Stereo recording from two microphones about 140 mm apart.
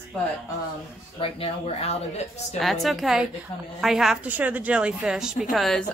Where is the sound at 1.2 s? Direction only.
45° left (ahead or behind).